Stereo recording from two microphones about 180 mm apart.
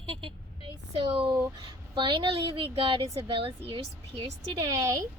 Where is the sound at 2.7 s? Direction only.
30° right (ahead or behind).